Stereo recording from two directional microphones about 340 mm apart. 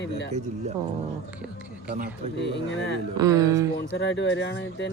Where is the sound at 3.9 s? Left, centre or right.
Left.